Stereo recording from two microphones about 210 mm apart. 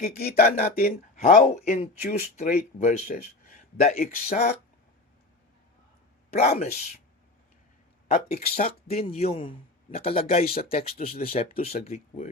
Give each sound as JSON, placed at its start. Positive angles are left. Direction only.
{"t": 0.2, "sound": "speech", "side_deg": 45}
{"t": 6.3, "sound": "speech", "side_deg": 30}
{"t": 8.0, "sound": "a man's voice", "side_deg": 35}